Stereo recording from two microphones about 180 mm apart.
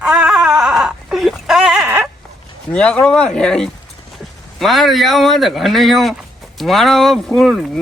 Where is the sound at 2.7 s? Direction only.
5° left (ahead or behind).